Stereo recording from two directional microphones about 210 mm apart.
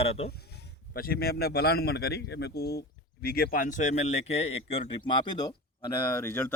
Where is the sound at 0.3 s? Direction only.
50° left (ahead or behind).